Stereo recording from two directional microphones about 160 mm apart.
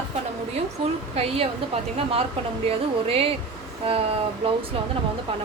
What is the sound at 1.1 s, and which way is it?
A woman's voice, 40° right (ahead or behind).